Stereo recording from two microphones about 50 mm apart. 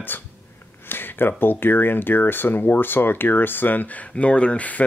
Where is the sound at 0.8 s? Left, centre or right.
Left.